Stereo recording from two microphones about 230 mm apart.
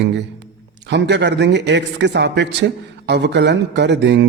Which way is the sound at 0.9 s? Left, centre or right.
Right.